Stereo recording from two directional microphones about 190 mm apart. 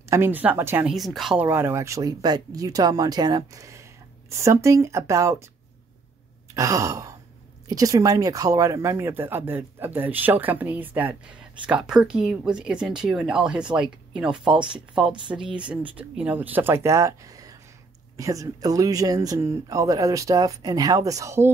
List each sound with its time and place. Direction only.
0.1 s speech: 10° right (ahead or behind)
6.5 s sigh: 15° right (ahead or behind)
7.6 s speech: 20° right (ahead or behind)